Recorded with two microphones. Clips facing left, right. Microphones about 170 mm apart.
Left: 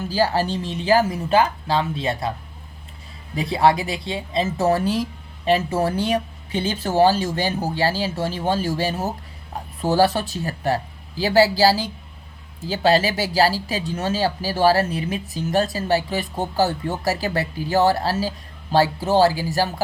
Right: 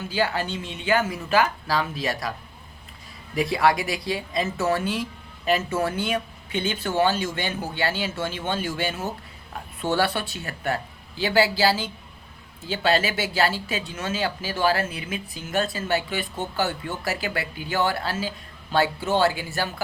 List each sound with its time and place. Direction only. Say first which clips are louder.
0.0 s speech: left 5 dB; 35° left (ahead or behind)
3.3 s speech: left 3 dB; 30° left (ahead or behind)